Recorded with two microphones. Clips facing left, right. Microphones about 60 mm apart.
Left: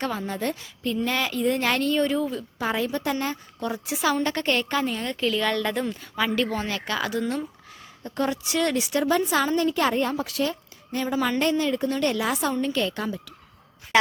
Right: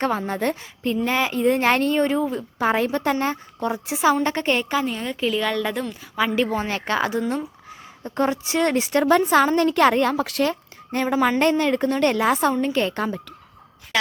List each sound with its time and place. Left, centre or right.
0.0 s a woman's voice: right
0.9 s a woman's voice: right
4.7 s a woman's voice: centre
6.4 s a woman's voice: right
7.2 s a woman's voice: right
8.0 s a woman's voice: right
9.6 s a woman's voice: right
13.9 s a woman's voice: left